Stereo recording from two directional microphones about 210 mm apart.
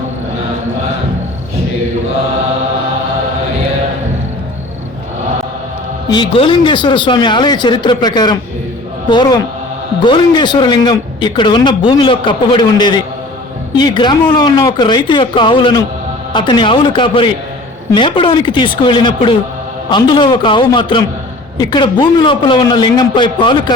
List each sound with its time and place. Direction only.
6.1 s a man's voice: 25° left (ahead or behind)